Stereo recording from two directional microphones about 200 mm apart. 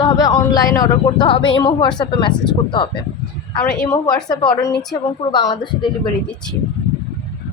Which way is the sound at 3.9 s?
15° left (ahead or behind).